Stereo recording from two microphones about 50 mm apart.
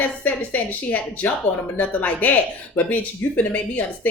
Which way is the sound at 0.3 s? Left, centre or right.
Left.